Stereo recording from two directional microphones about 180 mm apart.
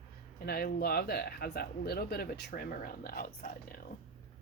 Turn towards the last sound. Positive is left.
turn(degrees=55)  # may be behind; listen again after turning